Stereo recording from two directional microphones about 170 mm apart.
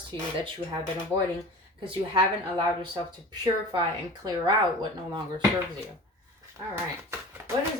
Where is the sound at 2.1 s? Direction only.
30° right (ahead or behind).